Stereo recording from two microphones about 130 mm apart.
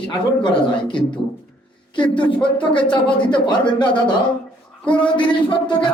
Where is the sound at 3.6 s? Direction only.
10° left (ahead or behind).